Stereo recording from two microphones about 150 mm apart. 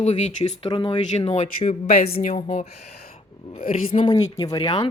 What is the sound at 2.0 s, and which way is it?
Speech, 90° left.